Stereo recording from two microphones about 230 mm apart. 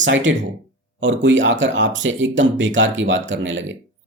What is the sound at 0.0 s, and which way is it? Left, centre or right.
Speech, right.